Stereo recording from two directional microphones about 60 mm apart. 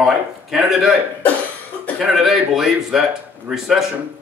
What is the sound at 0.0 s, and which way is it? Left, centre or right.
Speech, centre.